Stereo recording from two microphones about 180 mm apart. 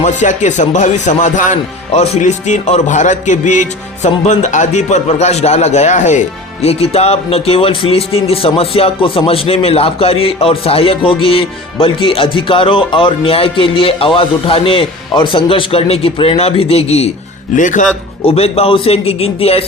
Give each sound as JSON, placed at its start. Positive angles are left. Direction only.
{"t": 0.0, "sound": "speech", "side_deg": 40}
{"t": 17.5, "sound": "speech", "side_deg": 45}
{"t": 18.3, "sound": "speech", "side_deg": 35}